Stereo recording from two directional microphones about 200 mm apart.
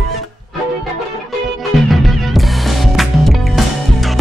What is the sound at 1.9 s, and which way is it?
Music, centre (ahead or behind).